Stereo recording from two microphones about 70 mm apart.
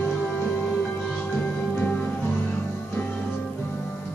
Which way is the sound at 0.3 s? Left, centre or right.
Centre.